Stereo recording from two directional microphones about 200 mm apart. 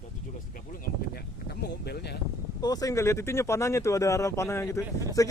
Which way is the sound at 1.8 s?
55° left (ahead or behind).